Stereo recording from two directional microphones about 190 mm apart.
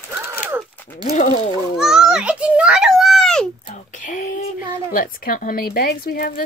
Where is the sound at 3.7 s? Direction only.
40° left (ahead or behind).